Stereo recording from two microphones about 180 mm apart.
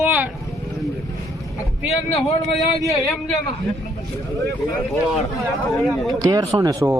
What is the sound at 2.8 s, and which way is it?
Speech, centre (ahead or behind).